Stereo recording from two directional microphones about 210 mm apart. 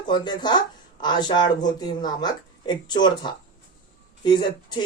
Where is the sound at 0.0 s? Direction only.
20° left (ahead or behind).